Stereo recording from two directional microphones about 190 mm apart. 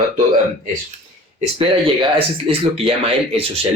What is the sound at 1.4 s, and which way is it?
Speech, 30° right (ahead or behind).